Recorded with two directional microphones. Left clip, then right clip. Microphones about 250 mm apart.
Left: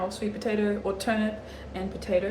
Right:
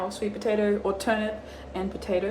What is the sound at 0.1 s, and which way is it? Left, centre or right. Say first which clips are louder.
Speech: right 3 dB; centre.